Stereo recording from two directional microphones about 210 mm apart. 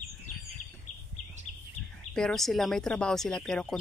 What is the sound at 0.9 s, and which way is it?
Bird, 35° left (ahead or behind).